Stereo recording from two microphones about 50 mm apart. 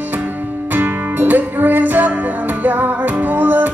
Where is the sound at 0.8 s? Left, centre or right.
Right.